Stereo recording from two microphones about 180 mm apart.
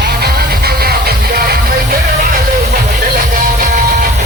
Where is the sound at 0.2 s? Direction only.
60° right (ahead or behind).